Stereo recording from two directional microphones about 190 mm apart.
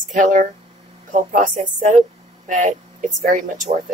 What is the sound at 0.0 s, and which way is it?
Speech, 40° right (ahead or behind).